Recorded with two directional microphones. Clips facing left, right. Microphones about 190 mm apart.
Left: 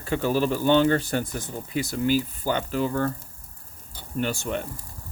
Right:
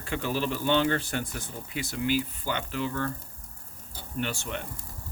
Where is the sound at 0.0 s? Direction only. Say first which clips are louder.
Left 6 dB; 40° left (ahead or behind).